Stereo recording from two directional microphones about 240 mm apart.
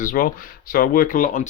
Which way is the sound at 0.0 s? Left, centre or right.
Left.